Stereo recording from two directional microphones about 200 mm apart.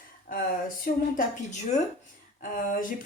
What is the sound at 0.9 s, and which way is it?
Speech, 45° left (ahead or behind).